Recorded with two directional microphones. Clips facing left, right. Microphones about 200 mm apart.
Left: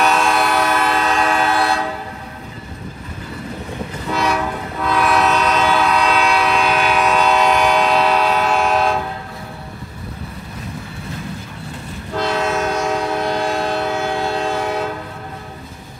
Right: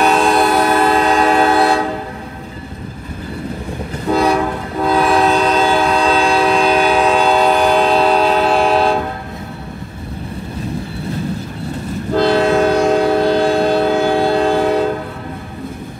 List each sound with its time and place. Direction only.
0.0 s train: 35° right (ahead or behind)
4.1 s train: 35° right (ahead or behind)
12.1 s train: 35° right (ahead or behind)